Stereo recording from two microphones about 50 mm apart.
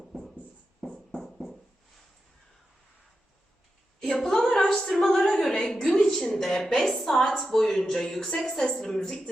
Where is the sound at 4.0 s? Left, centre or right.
Centre.